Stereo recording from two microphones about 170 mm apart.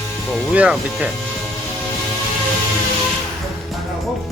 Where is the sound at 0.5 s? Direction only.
10° right (ahead or behind).